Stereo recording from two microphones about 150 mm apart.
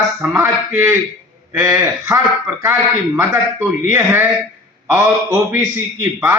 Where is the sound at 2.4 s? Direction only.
15° right (ahead or behind).